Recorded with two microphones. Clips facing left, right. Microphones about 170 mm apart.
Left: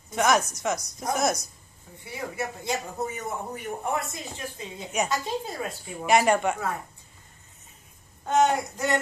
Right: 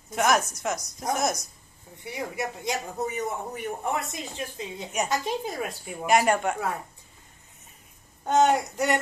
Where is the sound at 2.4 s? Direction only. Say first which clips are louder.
Left 1 dB; 20° right (ahead or behind).